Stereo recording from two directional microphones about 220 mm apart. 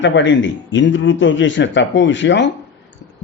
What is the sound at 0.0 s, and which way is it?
Speech, 55° left (ahead or behind).